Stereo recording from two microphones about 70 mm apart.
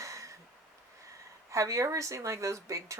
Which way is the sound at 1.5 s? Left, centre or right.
Right.